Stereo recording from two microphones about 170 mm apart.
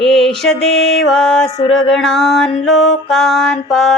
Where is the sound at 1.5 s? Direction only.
25° left (ahead or behind).